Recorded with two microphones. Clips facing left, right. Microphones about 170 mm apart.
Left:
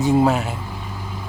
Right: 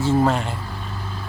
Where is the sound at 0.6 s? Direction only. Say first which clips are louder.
Even; 15° left (ahead or behind).